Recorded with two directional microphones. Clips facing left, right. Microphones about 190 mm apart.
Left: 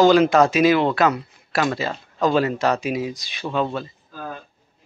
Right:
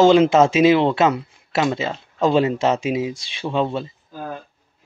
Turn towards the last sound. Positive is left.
turn(degrees=-25)  # may be behind; listen again after turning